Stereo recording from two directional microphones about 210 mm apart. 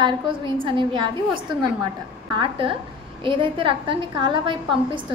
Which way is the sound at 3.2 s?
25° right (ahead or behind).